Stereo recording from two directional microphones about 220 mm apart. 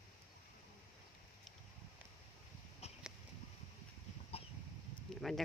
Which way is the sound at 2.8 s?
30° left (ahead or behind).